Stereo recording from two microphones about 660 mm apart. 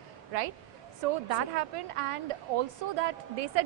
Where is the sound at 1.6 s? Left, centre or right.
Right.